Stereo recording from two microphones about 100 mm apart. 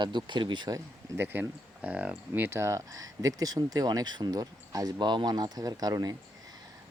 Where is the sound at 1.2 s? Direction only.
20° right (ahead or behind).